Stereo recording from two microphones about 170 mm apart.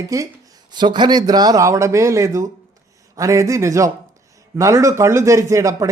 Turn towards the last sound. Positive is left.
turn(degrees=-20)  # may be behind; listen again after turning